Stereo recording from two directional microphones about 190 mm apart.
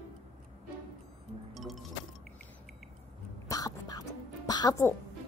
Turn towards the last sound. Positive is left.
turn(degrees=20)  # may be behind; listen again after turning